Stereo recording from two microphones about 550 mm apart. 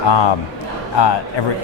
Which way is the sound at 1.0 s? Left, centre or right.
Left.